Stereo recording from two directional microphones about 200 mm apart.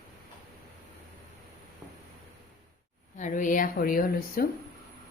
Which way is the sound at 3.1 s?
40° left (ahead or behind).